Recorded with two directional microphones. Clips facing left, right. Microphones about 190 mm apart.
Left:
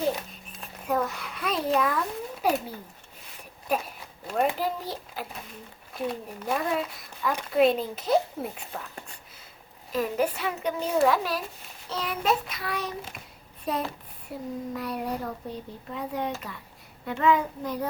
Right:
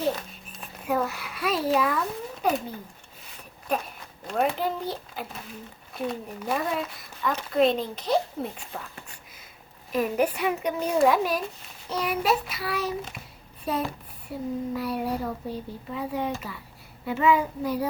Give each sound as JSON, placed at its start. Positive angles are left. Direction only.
{"t": 0.6, "sound": "a child's voice", "side_deg": -5}
{"t": 4.3, "sound": "speech", "side_deg": 0}
{"t": 9.9, "sound": "a child's voice", "side_deg": -15}